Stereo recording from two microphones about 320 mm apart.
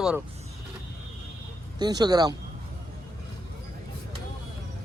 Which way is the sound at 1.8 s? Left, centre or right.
Centre.